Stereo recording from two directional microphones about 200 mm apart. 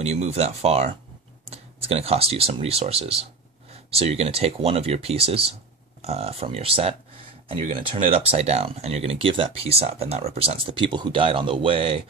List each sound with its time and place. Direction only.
0.0 s speech: 35° right (ahead or behind)